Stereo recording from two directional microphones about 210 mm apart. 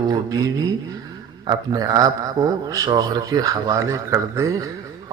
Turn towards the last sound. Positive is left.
turn(degrees=-15)  # may be behind; listen again after turning